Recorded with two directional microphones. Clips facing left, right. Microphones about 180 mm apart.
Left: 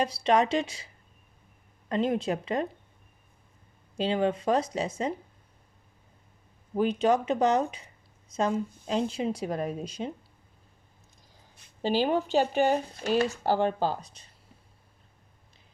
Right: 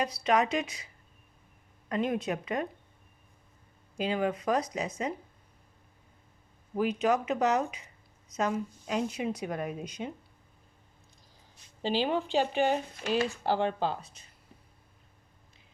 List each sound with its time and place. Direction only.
0.0 s speech: 30° left (ahead or behind)
1.9 s speech: 30° left (ahead or behind)
3.9 s speech: 30° left (ahead or behind)
6.7 s speech: 30° left (ahead or behind)
11.5 s speech: 50° left (ahead or behind)